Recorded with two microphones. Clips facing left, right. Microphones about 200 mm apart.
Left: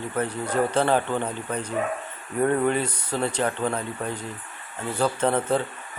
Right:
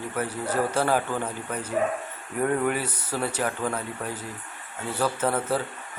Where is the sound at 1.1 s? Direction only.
20° left (ahead or behind).